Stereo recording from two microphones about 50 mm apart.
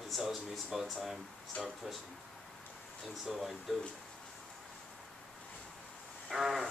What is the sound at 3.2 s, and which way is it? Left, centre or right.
Speech, centre.